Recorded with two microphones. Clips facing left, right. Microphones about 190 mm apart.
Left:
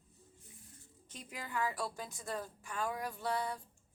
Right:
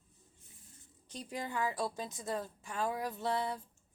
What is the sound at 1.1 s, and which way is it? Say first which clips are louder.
A woman's voice: right 4 dB; 30° right (ahead or behind).